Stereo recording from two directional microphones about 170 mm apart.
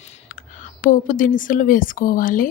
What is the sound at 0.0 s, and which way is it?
Speech, 50° left (ahead or behind).